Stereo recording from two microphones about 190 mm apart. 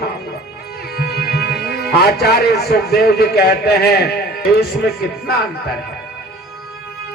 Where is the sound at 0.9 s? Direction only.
60° left (ahead or behind).